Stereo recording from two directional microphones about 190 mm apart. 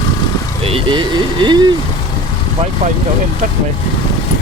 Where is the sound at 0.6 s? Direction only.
25° right (ahead or behind).